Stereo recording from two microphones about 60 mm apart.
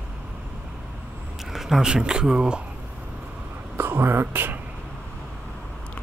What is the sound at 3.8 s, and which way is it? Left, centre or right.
Whispering, right.